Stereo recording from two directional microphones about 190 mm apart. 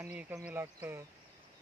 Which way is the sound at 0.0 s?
10° right (ahead or behind).